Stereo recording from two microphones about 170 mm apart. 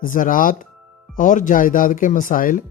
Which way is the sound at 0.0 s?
55° left (ahead or behind).